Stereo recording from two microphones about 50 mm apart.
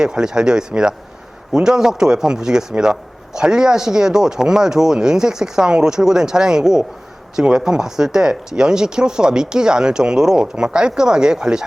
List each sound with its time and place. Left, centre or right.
0.0 s a man's voice: centre